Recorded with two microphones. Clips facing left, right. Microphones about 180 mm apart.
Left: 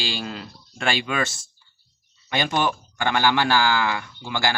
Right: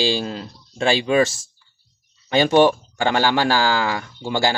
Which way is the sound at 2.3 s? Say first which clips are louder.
Right 9 dB; 30° right (ahead or behind).